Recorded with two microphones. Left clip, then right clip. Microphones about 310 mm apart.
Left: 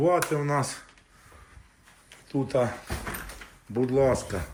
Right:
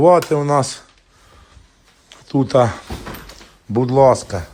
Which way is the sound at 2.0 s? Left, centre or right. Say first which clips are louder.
Right 11 dB; right.